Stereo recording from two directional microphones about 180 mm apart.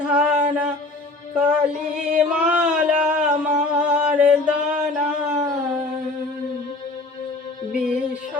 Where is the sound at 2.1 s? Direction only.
5° right (ahead or behind).